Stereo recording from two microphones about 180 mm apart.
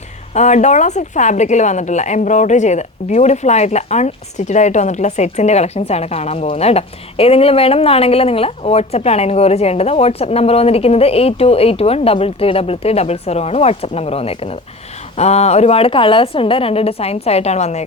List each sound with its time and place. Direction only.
0.3 s speech: 40° left (ahead or behind)